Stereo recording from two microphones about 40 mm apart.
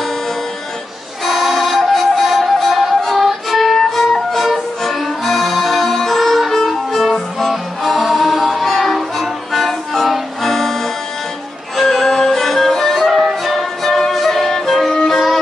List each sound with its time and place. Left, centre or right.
1.2 s music: centre